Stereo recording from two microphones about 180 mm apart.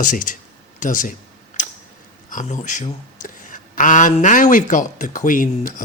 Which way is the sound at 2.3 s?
45° left (ahead or behind).